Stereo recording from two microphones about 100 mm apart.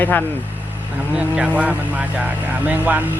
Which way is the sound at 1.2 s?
10° right (ahead or behind).